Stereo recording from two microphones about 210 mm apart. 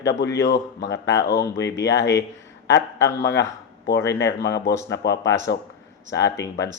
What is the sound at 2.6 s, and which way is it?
Speech, 55° left (ahead or behind).